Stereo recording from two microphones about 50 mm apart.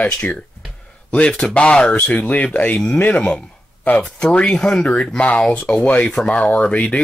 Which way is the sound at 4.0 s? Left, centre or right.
Centre.